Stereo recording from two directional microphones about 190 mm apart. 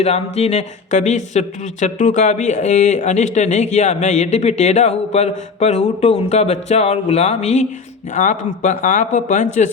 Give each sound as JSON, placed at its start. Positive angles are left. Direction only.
{"t": 0.0, "sound": "speech", "side_deg": 35}